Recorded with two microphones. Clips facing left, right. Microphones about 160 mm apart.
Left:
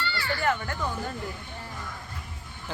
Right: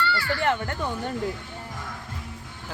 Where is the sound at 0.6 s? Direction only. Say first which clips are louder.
Right 2 dB; 30° right (ahead or behind).